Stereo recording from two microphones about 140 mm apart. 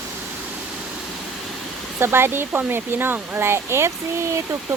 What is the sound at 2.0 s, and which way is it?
Speech, 15° right (ahead or behind).